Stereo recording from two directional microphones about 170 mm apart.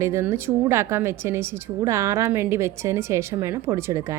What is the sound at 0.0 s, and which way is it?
A woman's voice, 15° right (ahead or behind).